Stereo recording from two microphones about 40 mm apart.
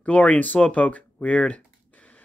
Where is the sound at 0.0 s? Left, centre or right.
Left.